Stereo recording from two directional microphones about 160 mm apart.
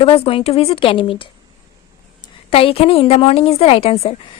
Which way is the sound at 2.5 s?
35° left (ahead or behind).